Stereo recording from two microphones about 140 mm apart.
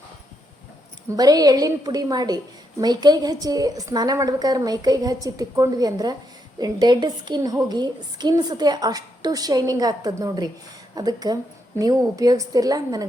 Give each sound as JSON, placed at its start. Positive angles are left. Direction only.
{"t": 1.1, "sound": "a woman's voice", "side_deg": -25}